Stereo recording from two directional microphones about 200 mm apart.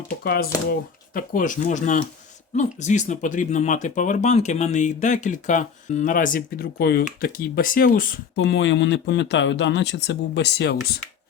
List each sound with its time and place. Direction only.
1.1 s speech: 40° left (ahead or behind); by 11.0 s 60° left (ahead or behind)